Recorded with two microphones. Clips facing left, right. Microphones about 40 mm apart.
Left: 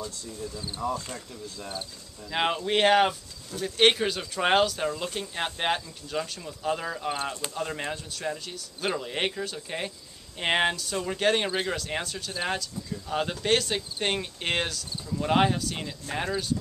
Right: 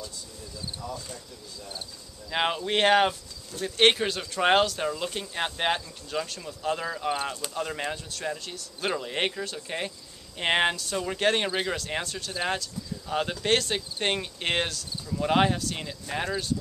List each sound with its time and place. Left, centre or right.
0.7 s speech: left
2.3 s speech: centre